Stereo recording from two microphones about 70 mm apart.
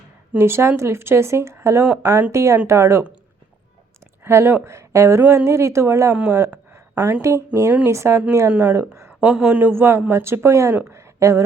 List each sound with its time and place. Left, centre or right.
0.3 s a woman's voice: right
4.2 s speech: right
9.2 s a man's voice: centre; by 11.4 s right